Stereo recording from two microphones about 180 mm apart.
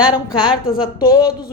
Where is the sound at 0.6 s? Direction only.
55° left (ahead or behind).